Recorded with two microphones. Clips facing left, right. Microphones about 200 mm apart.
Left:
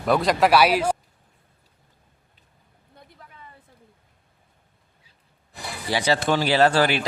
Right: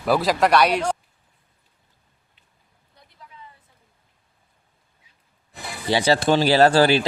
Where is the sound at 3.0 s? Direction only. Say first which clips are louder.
Left 6 dB; 55° left (ahead or behind).